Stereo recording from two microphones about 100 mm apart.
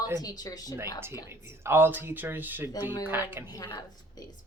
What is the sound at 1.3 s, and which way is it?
Speech, 25° right (ahead or behind).